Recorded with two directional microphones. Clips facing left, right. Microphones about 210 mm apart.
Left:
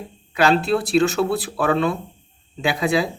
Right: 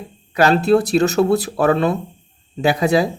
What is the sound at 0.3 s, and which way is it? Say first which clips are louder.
Speech: right 4 dB; 45° right (ahead or behind).